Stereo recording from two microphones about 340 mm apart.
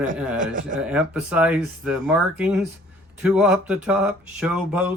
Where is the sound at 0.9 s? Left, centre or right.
Centre.